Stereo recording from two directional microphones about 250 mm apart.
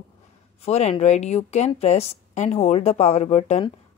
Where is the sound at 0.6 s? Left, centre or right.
Left.